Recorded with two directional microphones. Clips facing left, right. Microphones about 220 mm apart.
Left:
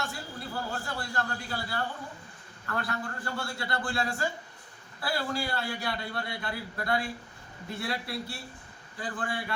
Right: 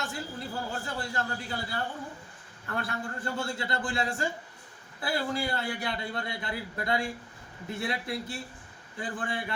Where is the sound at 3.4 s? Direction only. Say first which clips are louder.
Right 1 dB; 20° right (ahead or behind).